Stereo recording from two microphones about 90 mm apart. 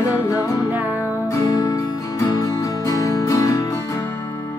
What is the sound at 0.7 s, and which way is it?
Music, 20° right (ahead or behind).